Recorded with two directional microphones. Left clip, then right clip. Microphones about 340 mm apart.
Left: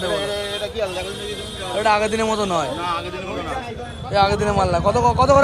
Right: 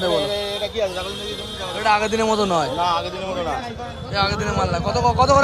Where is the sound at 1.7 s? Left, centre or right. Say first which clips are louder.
Left 1 dB; centre.